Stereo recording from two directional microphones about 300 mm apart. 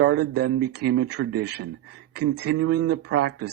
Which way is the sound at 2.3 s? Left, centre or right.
Right.